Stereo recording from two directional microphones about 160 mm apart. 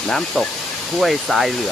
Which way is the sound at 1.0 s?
Centre (ahead or behind).